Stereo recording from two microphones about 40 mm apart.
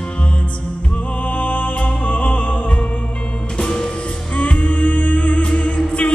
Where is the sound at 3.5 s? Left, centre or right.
Centre.